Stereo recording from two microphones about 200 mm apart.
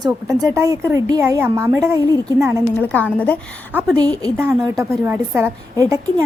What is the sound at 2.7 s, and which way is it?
A woman's voice, 10° left (ahead or behind).